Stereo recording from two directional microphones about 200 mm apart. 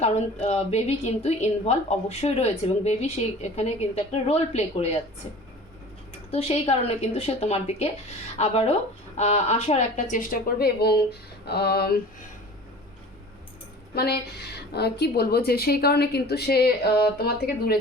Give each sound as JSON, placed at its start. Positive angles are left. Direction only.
{"t": 0.0, "sound": "a woman's voice", "side_deg": 35}
{"t": 6.3, "sound": "a woman's voice", "side_deg": 30}
{"t": 13.9, "sound": "a woman's voice", "side_deg": 50}